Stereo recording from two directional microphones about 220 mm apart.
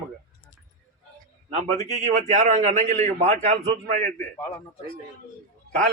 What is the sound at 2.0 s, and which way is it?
A man's voice, 30° right (ahead or behind).